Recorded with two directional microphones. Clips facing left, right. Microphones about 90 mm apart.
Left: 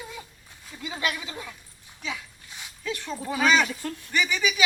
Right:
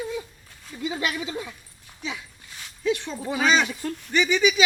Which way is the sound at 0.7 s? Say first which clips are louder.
Right 8 dB; 5° right (ahead or behind).